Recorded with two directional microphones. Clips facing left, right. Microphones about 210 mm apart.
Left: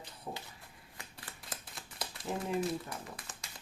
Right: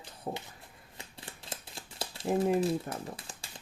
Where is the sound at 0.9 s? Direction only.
25° right (ahead or behind).